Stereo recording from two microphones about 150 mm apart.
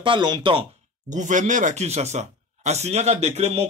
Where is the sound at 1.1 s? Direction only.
55° right (ahead or behind).